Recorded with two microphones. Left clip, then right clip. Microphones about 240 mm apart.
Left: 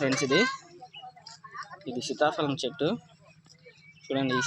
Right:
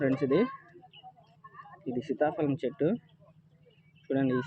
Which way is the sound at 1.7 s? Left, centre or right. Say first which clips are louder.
Right 5 dB; left.